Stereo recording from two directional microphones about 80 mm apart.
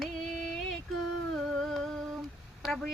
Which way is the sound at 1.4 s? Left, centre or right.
Centre.